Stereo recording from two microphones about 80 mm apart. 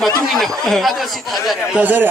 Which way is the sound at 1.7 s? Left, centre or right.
Right.